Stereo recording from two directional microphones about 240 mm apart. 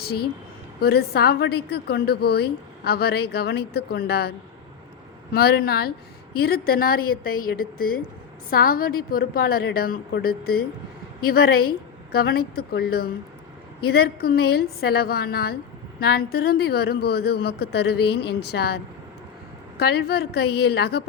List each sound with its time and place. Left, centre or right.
0.0 s a woman's voice: left